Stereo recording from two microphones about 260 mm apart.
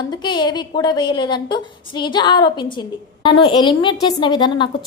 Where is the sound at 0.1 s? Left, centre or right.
Centre.